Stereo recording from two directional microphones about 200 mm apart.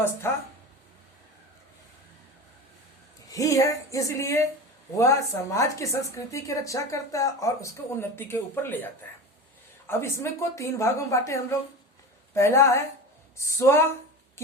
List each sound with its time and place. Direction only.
0.2 s a woman's voice: 10° left (ahead or behind)
3.2 s a woman's voice: 15° left (ahead or behind)
14.4 s a sound: 15° left (ahead or behind)